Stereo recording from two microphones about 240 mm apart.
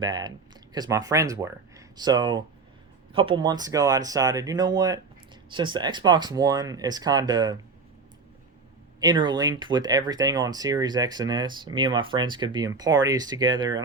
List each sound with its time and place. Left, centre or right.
0.0 s speech: centre
9.0 s speech: centre